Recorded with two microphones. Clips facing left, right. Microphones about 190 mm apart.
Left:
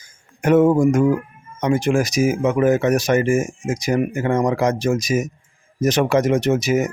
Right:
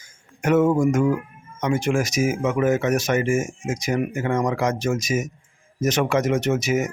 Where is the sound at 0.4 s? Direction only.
35° left (ahead or behind).